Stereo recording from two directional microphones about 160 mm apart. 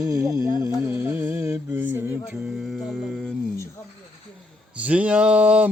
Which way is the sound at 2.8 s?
Centre (ahead or behind).